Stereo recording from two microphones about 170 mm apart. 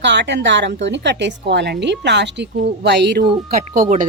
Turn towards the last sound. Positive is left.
turn(degrees=-55)  # may be behind; listen again after turning